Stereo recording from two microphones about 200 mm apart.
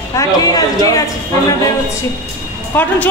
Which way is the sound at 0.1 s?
15° left (ahead or behind).